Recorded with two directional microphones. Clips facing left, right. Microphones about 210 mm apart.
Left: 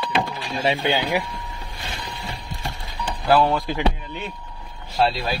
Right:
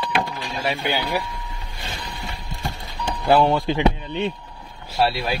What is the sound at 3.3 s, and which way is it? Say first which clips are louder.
Speech: right 1 dB; 20° right (ahead or behind).